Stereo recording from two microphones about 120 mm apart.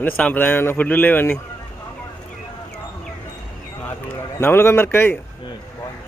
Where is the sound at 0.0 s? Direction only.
15° left (ahead or behind).